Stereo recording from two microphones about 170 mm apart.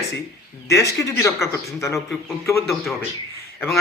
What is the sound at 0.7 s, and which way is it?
Speech, 20° left (ahead or behind).